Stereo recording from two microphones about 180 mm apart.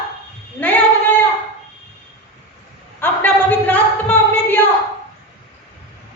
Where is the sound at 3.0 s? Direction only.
10° left (ahead or behind).